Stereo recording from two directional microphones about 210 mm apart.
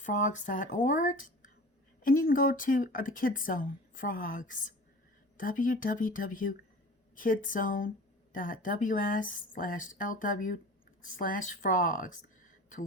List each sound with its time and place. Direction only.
0.0 s speech: 35° left (ahead or behind)